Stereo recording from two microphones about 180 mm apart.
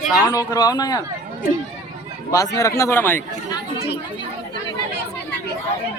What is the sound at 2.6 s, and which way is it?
Speech, 15° left (ahead or behind).